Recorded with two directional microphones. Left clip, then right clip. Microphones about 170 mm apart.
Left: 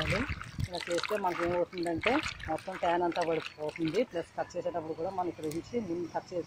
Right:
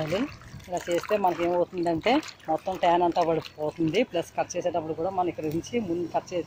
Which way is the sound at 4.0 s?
30° right (ahead or behind).